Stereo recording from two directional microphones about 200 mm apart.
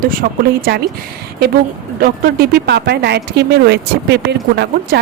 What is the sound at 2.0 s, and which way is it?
A woman's voice, 45° right (ahead or behind).